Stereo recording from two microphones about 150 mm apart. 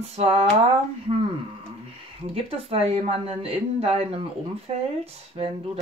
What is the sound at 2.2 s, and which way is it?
Speech, 40° right (ahead or behind).